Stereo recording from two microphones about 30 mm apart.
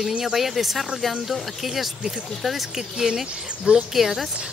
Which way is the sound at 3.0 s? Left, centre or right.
Centre.